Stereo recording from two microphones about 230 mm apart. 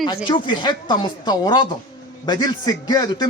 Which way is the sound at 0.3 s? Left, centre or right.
Centre.